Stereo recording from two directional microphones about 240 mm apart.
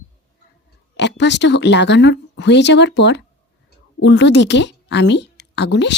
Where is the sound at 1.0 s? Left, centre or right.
Left.